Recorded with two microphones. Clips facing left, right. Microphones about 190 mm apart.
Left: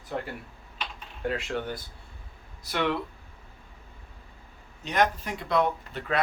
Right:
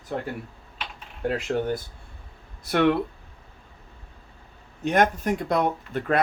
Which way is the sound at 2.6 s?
55° right (ahead or behind).